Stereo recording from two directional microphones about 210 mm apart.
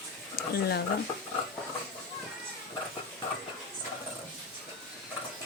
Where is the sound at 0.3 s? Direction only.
50° left (ahead or behind).